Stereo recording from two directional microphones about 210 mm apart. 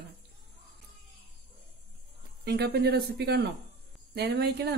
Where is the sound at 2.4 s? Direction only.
50° right (ahead or behind).